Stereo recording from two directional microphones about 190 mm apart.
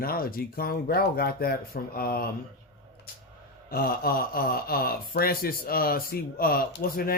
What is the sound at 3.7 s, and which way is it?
Speech, 50° left (ahead or behind).